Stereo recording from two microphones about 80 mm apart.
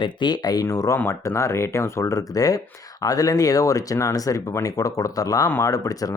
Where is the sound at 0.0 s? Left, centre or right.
Left.